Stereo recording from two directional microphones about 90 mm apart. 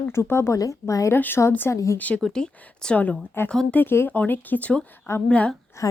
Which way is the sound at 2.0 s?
15° left (ahead or behind).